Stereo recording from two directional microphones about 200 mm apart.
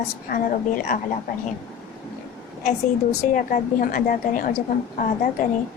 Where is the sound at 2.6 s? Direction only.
40° left (ahead or behind).